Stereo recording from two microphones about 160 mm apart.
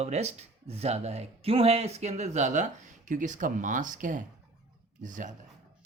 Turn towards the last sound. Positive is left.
turn(degrees=-55)  # may be behind; listen again after turning